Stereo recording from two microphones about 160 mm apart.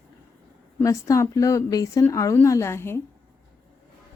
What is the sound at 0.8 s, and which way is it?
A woman's voice, 20° left (ahead or behind).